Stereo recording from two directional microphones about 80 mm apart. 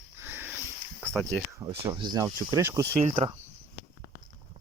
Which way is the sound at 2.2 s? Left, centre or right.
Right.